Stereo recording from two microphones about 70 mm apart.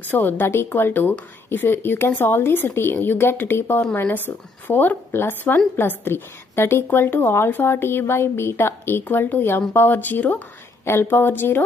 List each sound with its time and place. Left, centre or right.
0.1 s a woman's voice: left